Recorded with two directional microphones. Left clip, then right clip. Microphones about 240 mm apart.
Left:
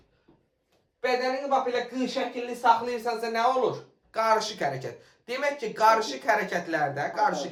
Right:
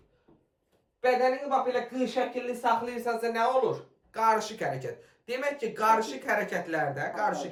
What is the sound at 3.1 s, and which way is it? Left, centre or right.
Speech, left.